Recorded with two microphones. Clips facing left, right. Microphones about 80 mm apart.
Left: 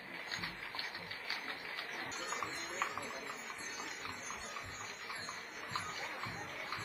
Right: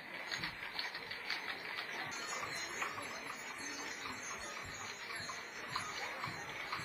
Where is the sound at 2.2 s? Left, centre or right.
Left.